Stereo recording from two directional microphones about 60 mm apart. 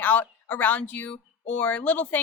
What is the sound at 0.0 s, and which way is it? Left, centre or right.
A woman's voice, left.